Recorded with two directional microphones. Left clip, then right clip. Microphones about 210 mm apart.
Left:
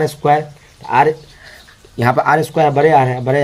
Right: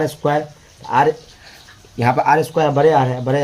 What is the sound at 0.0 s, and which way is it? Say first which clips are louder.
Speech: left 4 dB; 55° left (ahead or behind).